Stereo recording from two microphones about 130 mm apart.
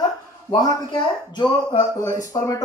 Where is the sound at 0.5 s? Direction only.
30° left (ahead or behind).